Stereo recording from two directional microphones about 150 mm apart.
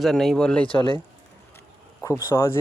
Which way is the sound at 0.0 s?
Centre (ahead or behind).